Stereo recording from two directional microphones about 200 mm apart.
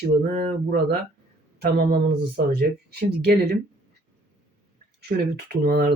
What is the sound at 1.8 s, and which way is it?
Speech, 50° right (ahead or behind).